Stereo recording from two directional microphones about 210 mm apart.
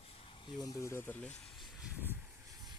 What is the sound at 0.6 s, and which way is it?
Speech, 15° left (ahead or behind).